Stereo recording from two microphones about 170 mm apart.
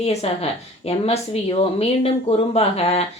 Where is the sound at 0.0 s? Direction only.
40° left (ahead or behind).